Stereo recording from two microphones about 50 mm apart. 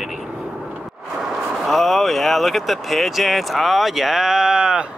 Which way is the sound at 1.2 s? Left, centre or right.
Centre.